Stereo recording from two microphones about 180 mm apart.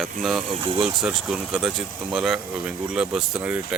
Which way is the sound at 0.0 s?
Centre (ahead or behind).